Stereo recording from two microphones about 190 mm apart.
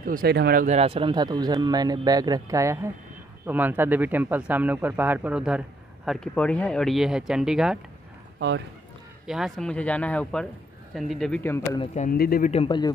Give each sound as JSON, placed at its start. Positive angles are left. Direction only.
{"t": 0.0, "sound": "speech", "side_deg": -50}
{"t": 0.7, "sound": "speech", "side_deg": -30}
{"t": 8.4, "sound": "speech", "side_deg": -65}
{"t": 9.2, "sound": "speech", "side_deg": 0}
{"t": 11.8, "sound": "speech", "side_deg": 35}
{"t": 12.1, "sound": "speech", "side_deg": 50}
{"t": 12.4, "sound": "a man's voice", "side_deg": 30}